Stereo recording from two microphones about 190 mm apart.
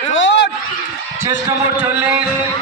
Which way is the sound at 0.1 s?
75° left (ahead or behind).